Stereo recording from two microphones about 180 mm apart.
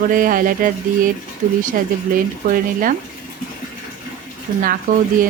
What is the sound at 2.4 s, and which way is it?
Speech, 45° right (ahead or behind).